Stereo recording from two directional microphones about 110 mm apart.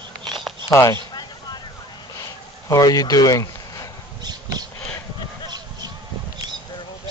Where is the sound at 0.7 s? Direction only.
25° left (ahead or behind).